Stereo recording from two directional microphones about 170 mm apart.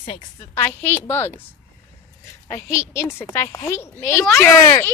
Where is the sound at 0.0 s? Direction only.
30° left (ahead or behind).